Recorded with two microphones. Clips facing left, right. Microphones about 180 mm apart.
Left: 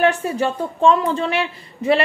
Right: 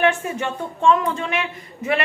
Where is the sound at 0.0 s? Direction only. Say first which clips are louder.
Left 3 dB; 35° left (ahead or behind).